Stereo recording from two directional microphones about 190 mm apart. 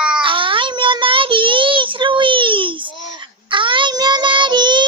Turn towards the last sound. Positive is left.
turn(degrees=-25)  # may be behind; listen again after turning